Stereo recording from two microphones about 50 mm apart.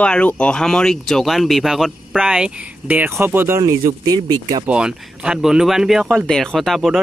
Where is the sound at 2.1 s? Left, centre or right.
Centre.